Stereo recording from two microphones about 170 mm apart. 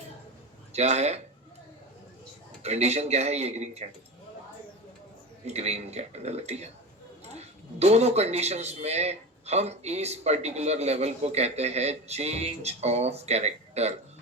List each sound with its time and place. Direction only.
0.7 s speech: 40° right (ahead or behind)
2.6 s speech: 40° right (ahead or behind)
5.5 s speech: 40° right (ahead or behind)